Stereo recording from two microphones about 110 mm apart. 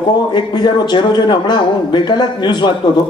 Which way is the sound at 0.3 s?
40° left (ahead or behind).